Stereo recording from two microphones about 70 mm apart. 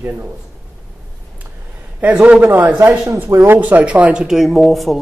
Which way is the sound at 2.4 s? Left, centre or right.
Right.